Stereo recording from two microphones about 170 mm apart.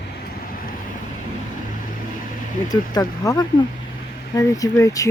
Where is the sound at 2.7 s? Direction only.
20° left (ahead or behind).